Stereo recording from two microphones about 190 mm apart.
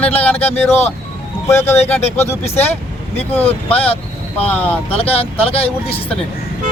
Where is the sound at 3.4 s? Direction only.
30° left (ahead or behind).